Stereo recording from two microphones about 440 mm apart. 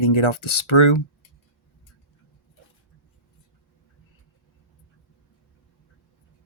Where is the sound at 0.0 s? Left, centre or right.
Left.